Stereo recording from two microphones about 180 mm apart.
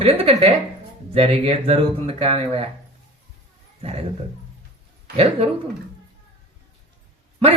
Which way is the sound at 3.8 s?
35° right (ahead or behind).